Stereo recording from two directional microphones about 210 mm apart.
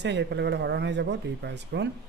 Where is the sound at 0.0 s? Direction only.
55° right (ahead or behind).